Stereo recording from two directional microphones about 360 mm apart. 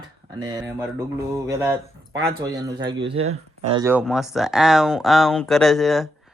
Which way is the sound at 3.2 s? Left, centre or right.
Right.